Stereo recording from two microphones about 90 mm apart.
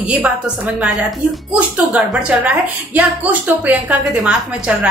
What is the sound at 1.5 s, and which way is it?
A woman's voice, 15° right (ahead or behind).